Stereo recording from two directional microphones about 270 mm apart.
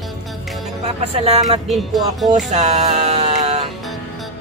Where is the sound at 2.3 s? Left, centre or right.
Right.